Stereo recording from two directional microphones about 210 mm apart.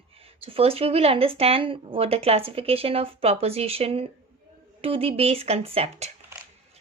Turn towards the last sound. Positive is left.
turn(degrees=-25)  # may be behind; listen again after turning